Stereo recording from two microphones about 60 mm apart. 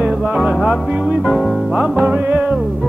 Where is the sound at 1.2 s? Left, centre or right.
Centre.